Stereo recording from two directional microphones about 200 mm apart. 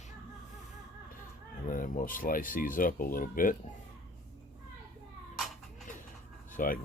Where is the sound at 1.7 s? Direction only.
40° left (ahead or behind).